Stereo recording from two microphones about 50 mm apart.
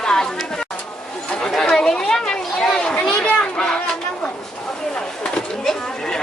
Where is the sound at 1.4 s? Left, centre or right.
Centre.